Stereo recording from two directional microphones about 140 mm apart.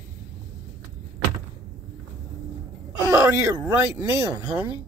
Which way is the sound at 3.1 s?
20° right (ahead or behind).